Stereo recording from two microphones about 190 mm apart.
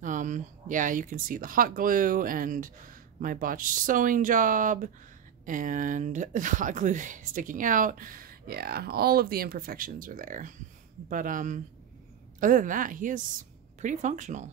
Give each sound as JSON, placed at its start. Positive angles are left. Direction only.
{"t": 0.0, "sound": "speech", "side_deg": -40}